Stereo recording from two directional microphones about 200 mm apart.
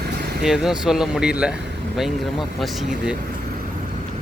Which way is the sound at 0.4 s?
5° right (ahead or behind).